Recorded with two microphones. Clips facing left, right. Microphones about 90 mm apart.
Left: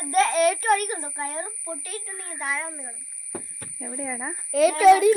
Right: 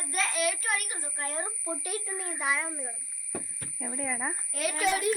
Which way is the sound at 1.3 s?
10° right (ahead or behind).